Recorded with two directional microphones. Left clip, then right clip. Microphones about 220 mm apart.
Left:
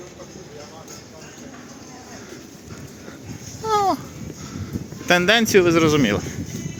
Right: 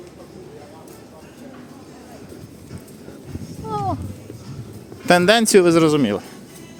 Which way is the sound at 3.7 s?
5° left (ahead or behind).